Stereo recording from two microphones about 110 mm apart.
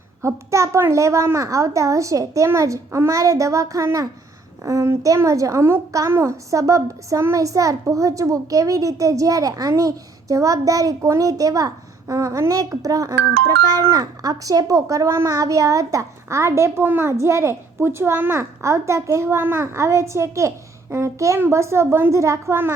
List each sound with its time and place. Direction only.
0.2 s a woman's voice: 25° right (ahead or behind)